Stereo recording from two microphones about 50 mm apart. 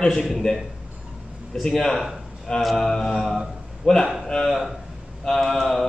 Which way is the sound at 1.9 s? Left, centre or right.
Centre.